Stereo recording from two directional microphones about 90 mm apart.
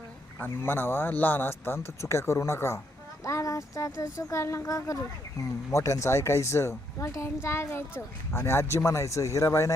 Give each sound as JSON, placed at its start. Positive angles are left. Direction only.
{"t": 0.3, "sound": "speech", "side_deg": 25}